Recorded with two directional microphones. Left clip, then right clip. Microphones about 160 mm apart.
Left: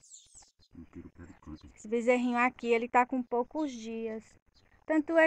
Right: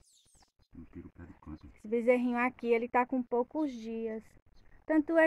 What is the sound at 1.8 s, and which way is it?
Speech, 5° right (ahead or behind).